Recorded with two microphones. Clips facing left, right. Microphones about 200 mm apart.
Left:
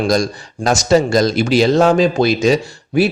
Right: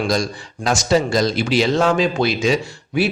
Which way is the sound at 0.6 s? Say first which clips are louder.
Left 4 dB; 45° left (ahead or behind).